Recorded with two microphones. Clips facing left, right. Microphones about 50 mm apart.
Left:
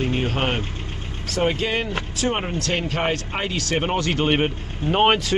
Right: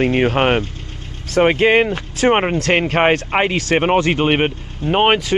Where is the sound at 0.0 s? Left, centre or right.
Right.